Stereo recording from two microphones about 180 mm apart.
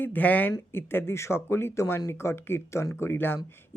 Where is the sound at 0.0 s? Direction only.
10° left (ahead or behind).